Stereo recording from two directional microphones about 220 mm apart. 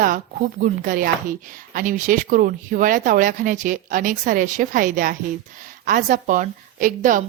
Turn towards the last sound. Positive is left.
turn(degrees=-35)  # may be behind; listen again after turning